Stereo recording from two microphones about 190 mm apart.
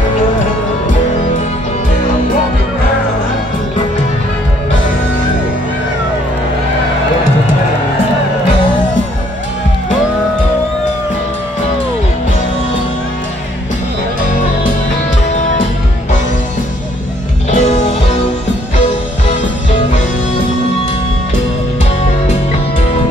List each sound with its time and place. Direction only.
17.5 s music: 40° left (ahead or behind)